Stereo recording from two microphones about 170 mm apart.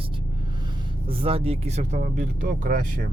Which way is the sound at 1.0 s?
35° right (ahead or behind).